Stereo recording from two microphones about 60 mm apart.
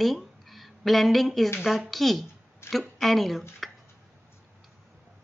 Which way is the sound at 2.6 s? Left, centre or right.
Left.